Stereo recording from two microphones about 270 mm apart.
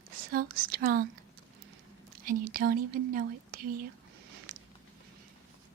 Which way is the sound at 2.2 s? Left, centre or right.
Right.